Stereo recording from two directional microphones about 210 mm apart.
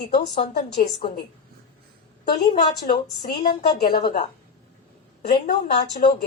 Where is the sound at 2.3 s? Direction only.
20° left (ahead or behind).